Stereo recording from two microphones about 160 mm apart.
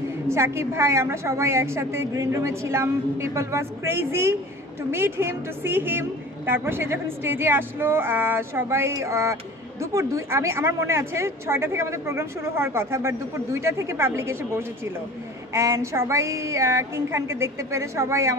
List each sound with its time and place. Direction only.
0.3 s a woman's voice: 15° right (ahead or behind)